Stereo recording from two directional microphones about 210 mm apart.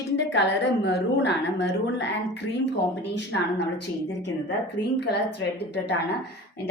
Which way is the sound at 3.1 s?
55° left (ahead or behind).